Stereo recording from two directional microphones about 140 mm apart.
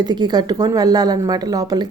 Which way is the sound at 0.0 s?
30° right (ahead or behind).